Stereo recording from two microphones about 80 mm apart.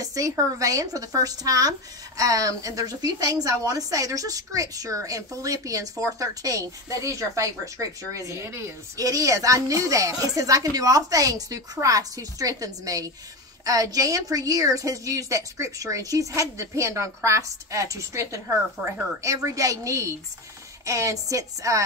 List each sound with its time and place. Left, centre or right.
0.0 s a woman's voice: right
8.3 s a woman's voice: right
8.9 s a woman's voice: right